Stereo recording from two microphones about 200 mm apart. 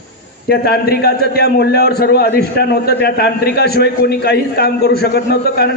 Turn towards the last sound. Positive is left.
turn(degrees=55)  # may be behind; listen again after turning